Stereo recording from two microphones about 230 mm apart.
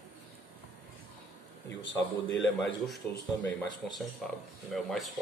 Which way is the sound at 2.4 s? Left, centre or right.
Centre.